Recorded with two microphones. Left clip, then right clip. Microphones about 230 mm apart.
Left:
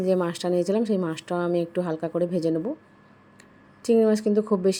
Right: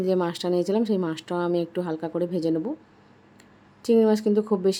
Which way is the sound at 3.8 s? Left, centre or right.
Centre.